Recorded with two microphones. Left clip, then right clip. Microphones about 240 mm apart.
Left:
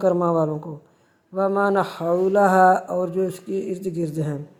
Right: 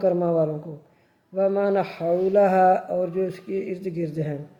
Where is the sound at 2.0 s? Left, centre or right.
Left.